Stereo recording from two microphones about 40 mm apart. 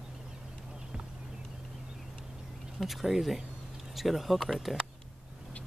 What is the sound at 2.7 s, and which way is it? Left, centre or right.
Speech, centre.